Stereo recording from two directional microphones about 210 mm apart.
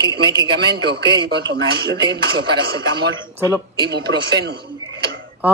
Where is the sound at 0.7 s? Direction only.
50° right (ahead or behind).